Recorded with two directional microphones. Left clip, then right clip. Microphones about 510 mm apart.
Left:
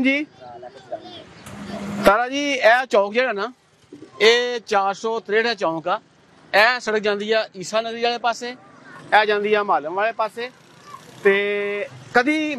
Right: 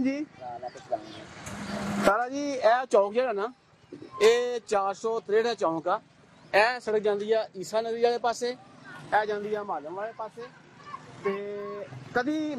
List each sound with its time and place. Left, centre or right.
0.0 s speech: left
2.0 s speech: left; by 8.5 s centre
9.1 s speech: left